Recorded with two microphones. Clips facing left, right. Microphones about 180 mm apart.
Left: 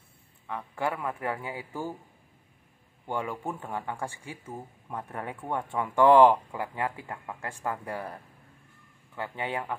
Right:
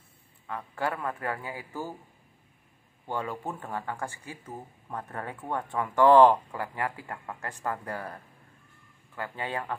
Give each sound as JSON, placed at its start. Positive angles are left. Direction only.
{"t": 0.5, "sound": "speech", "side_deg": 15}
{"t": 3.1, "sound": "speech", "side_deg": 15}